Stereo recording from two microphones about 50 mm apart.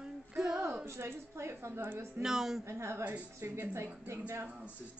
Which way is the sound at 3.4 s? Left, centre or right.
Right.